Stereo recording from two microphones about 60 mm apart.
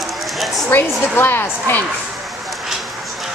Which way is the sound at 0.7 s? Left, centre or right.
Left.